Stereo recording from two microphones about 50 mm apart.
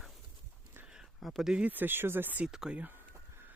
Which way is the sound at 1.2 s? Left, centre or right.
Centre.